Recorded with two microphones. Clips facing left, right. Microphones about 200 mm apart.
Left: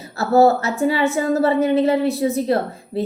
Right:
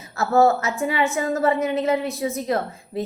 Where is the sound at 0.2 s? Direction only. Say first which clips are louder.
Left 3 dB; 35° left (ahead or behind).